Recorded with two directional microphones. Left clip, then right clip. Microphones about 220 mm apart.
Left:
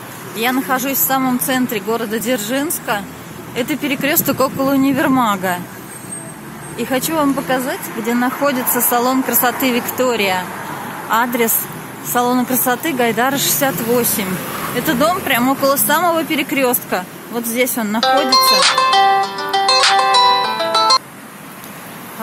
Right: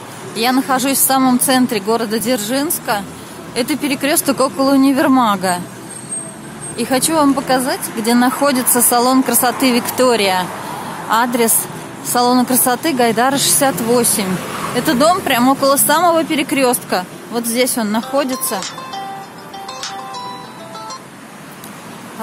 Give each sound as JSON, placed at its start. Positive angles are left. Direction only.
{"t": 0.4, "sound": "speech", "side_deg": -15}
{"t": 6.8, "sound": "speech", "side_deg": -10}
{"t": 14.3, "sound": "a sound", "side_deg": 45}
{"t": 14.8, "sound": "speech", "side_deg": -10}
{"t": 18.6, "sound": "music", "side_deg": 30}